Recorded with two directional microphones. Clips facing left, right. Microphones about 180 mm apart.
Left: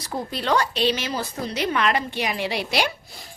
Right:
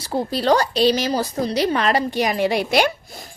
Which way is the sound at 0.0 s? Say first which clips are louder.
Right 7 dB; 30° right (ahead or behind).